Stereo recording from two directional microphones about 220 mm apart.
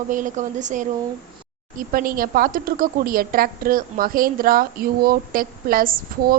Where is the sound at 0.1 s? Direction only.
35° right (ahead or behind).